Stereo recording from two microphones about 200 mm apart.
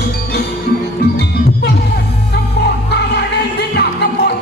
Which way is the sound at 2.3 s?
55° left (ahead or behind).